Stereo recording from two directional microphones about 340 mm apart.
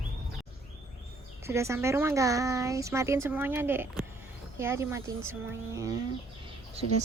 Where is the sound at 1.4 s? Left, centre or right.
Centre.